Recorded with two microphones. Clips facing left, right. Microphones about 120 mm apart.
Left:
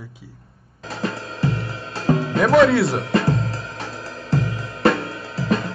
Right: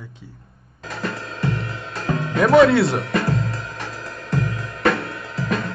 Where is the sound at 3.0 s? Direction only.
25° left (ahead or behind).